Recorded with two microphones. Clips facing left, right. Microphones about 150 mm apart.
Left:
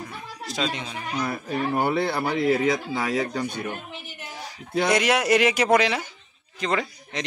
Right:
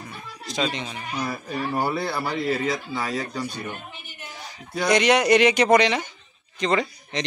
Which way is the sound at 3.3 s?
55° left (ahead or behind).